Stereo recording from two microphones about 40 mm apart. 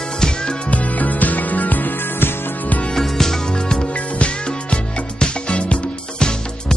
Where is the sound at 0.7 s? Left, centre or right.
Left.